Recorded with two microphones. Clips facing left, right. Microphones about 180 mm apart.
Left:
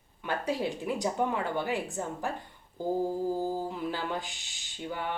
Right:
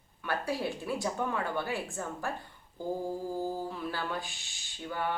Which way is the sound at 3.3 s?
20° left (ahead or behind).